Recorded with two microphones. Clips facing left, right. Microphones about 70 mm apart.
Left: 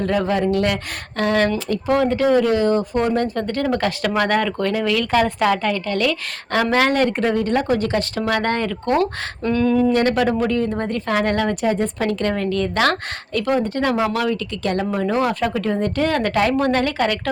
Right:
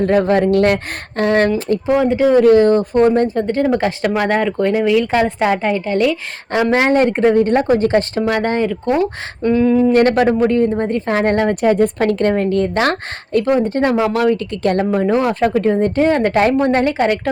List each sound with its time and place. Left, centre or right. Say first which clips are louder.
0.0 s speech: right 6 dB; right
1.9 s speech: right 3 dB; centre
2.4 s speech: right 7 dB; right
3.1 s speech: right 6 dB; right
8.2 s speech: right 4 dB; centre
9.9 s a woman's voice: right 5 dB; right
11.6 s a woman's voice: right 6 dB; right
12.2 s speech: right 6 dB; right